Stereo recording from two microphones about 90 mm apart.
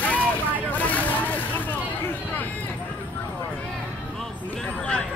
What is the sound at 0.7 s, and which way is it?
Vehicle, 15° left (ahead or behind).